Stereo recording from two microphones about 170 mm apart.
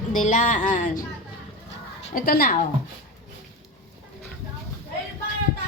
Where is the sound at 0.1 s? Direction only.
45° left (ahead or behind).